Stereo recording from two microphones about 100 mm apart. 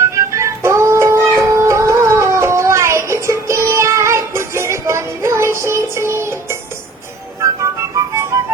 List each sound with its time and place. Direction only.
0.1 s music: 30° right (ahead or behind)